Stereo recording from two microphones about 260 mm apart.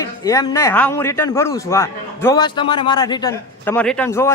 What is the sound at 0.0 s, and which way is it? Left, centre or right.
A man's voice, centre.